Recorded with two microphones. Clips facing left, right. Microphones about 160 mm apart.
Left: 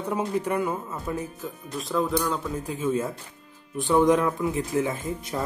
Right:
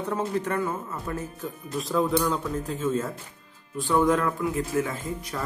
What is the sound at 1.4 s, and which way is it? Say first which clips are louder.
Speech: right 2 dB; centre (ahead or behind).